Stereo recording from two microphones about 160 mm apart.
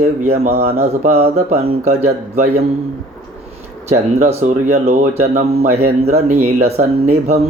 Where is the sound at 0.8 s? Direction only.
40° right (ahead or behind).